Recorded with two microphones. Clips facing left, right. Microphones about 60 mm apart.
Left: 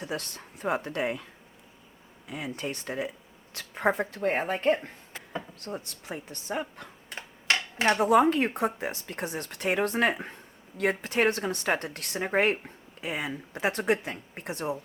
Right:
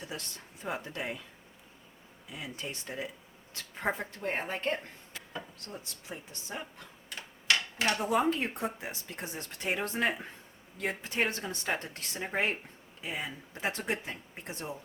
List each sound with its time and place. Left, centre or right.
0.1 s speech: left
2.3 s speech: left
4.6 s speech: left
5.5 s speech: left
7.1 s typewriter: left
8.0 s speech: left